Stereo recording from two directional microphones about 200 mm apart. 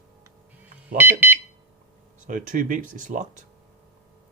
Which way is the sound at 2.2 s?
40° right (ahead or behind).